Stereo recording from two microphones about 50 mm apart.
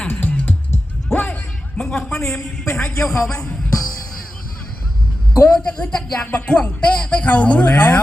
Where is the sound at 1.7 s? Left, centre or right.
Centre.